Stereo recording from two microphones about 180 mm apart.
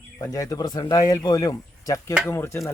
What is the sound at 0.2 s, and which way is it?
Speech, 20° left (ahead or behind).